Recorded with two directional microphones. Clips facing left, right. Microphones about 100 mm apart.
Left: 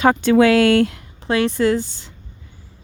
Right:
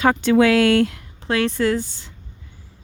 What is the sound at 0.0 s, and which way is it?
Speech, 30° left (ahead or behind).